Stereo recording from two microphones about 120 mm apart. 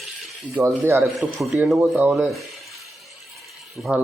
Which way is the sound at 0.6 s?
25° right (ahead or behind).